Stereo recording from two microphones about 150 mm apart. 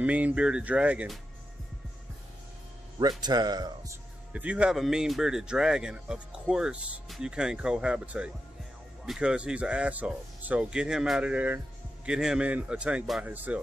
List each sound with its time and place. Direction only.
0.0 s speech: 10° right (ahead or behind)
3.0 s speech: 25° right (ahead or behind)
4.3 s speech: 10° right (ahead or behind)